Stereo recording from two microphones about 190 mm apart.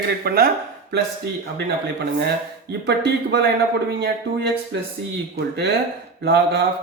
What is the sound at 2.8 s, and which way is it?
Speech, 60° right (ahead or behind).